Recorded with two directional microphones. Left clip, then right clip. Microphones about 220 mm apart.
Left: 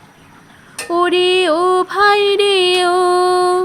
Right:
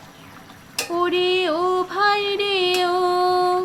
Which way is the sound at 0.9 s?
45° left (ahead or behind).